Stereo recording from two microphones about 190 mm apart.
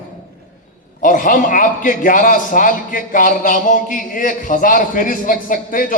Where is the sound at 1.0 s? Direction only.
45° left (ahead or behind).